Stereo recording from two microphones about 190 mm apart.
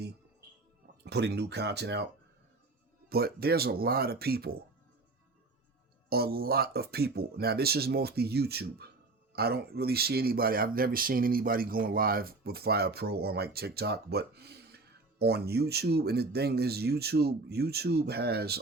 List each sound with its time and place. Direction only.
1.0 s speech: 60° right (ahead or behind)
3.1 s speech: 55° right (ahead or behind)
6.1 s speech: 55° right (ahead or behind)